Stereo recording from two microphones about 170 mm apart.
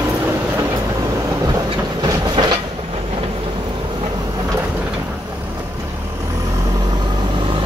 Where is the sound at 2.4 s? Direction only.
30° right (ahead or behind).